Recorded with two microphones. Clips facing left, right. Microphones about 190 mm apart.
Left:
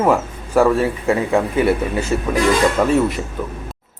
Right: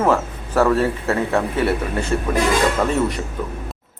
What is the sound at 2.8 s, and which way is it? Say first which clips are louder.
Speech: left 4 dB; 10° left (ahead or behind).